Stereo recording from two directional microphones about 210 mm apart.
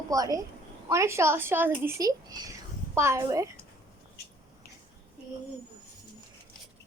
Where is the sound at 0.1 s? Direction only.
15° right (ahead or behind).